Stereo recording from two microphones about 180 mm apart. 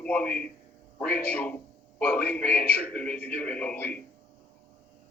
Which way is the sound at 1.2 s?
10° left (ahead or behind).